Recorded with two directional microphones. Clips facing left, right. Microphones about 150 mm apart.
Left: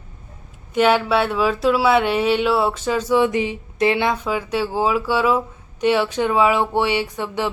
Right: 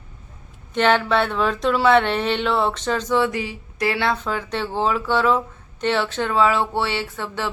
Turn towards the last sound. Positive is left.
turn(degrees=15)  # may be behind; listen again after turning